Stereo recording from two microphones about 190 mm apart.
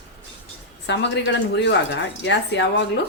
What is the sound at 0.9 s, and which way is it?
A woman's voice, 65° left (ahead or behind).